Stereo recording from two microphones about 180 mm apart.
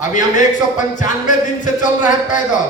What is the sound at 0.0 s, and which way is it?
Speech, 45° left (ahead or behind).